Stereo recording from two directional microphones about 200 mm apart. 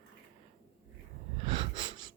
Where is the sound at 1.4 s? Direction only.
25° right (ahead or behind).